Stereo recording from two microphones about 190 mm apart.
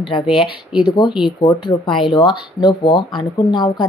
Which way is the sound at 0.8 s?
25° left (ahead or behind).